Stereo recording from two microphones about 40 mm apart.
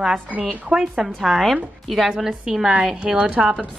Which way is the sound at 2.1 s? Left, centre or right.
Centre.